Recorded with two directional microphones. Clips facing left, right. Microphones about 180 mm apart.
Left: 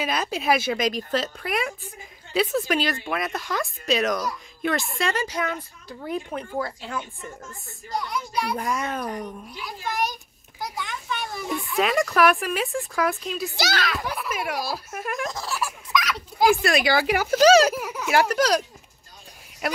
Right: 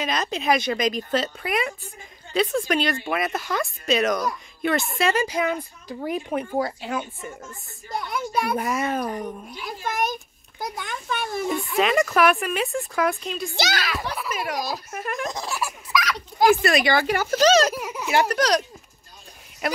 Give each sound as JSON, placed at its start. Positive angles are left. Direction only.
{"t": 0.0, "sound": "a woman's voice", "side_deg": 5}
{"t": 8.1, "sound": "a child's voice", "side_deg": -50}
{"t": 8.5, "sound": "speech", "side_deg": -5}
{"t": 9.6, "sound": "a child's voice", "side_deg": -50}
{"t": 11.7, "sound": "speech", "side_deg": 0}
{"t": 15.3, "sound": "speech", "side_deg": -15}
{"t": 19.6, "sound": "speech", "side_deg": 5}